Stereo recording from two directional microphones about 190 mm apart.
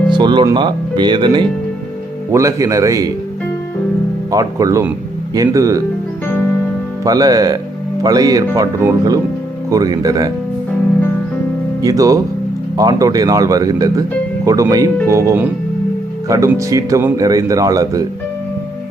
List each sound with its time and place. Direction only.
0.1 s speech: 25° right (ahead or behind)
4.3 s speech: 20° right (ahead or behind)
7.0 s speech: 20° right (ahead or behind)
11.8 s speech: 20° right (ahead or behind)